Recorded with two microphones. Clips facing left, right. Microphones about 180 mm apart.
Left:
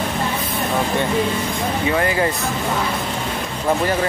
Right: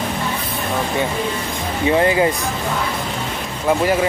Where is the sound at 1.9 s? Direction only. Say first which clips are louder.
Right 5 dB; 20° right (ahead or behind).